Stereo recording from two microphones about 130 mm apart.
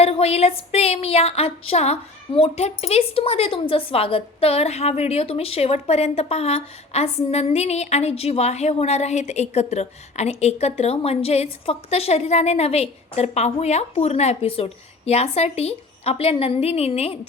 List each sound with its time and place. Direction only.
0.0 s speech: 50° left (ahead or behind)